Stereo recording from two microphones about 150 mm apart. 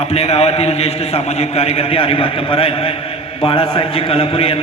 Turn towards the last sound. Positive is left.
turn(degrees=40)  # may be behind; listen again after turning